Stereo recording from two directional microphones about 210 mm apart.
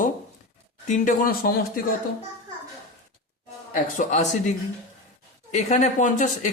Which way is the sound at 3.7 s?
35° left (ahead or behind).